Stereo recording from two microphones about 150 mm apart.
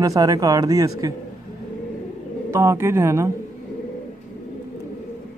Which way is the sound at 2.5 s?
20° right (ahead or behind).